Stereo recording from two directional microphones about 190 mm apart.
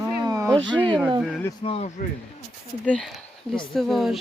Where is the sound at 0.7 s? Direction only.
5° left (ahead or behind).